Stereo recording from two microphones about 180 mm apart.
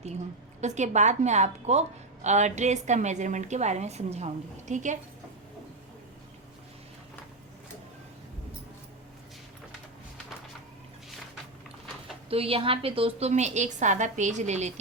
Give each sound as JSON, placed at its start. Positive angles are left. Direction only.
{"t": 0.6, "sound": "a woman's voice", "side_deg": -40}
{"t": 12.3, "sound": "a woman's voice", "side_deg": -30}